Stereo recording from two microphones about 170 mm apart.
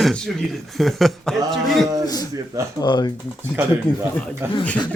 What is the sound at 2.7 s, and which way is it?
Speech, 25° left (ahead or behind).